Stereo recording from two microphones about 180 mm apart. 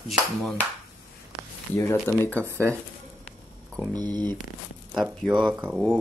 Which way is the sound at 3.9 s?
20° right (ahead or behind).